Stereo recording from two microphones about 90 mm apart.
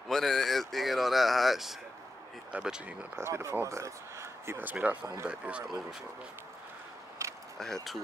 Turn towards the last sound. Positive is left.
turn(degrees=5)  # may be behind; listen again after turning